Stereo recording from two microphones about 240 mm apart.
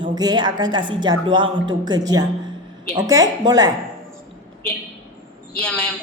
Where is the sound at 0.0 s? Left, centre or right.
Centre.